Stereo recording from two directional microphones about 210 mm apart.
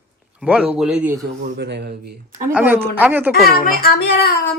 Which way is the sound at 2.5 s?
5° right (ahead or behind).